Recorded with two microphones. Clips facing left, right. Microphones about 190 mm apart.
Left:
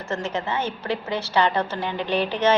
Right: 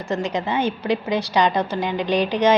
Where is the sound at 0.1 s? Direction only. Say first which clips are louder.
Right 4 dB; 15° right (ahead or behind).